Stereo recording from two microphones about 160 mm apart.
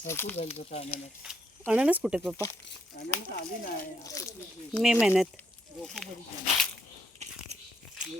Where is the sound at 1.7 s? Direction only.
5° right (ahead or behind).